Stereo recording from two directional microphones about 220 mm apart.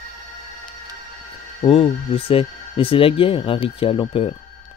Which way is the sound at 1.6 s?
25° left (ahead or behind).